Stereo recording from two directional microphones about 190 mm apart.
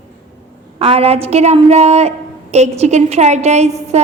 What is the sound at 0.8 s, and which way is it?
A woman's voice, 30° right (ahead or behind).